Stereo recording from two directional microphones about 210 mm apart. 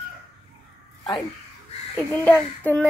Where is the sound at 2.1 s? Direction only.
10° left (ahead or behind).